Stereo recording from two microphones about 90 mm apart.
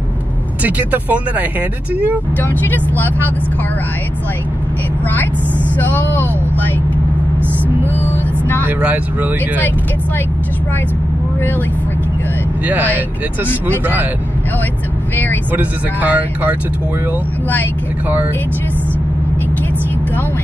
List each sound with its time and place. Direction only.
0.7 s speech: 20° right (ahead or behind)
2.4 s speech: 20° left (ahead or behind)
5.8 s speech: 20° left (ahead or behind)
7.9 s speech: 20° left (ahead or behind)
8.6 s speech: 15° right (ahead or behind)
12.6 s speech: 20° right (ahead or behind)
15.5 s speech: 20° right (ahead or behind)